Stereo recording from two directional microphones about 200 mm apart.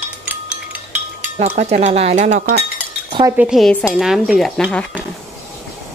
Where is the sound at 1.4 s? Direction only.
35° right (ahead or behind).